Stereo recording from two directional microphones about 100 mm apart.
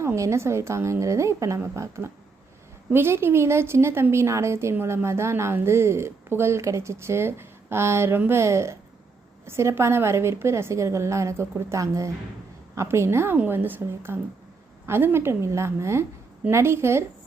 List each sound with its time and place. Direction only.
0.0 s a woman's voice: 30° right (ahead or behind)